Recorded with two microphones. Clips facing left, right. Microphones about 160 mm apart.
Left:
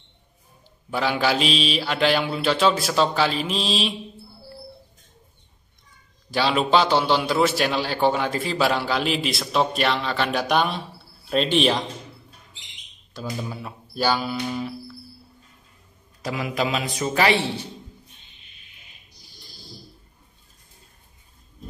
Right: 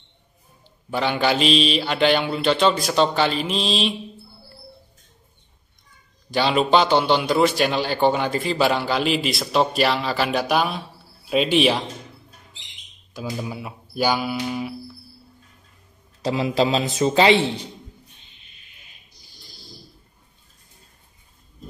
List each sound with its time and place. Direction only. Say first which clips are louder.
0.8 s a man's voice: right 1 dB; centre (ahead or behind)
6.3 s a man's voice: right 2 dB; centre (ahead or behind)
13.1 s speech: right 2 dB; 10° right (ahead or behind)
16.3 s a man's voice: right 5 dB; 25° right (ahead or behind)